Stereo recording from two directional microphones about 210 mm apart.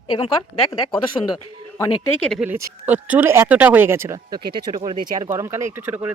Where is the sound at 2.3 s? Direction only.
5° right (ahead or behind).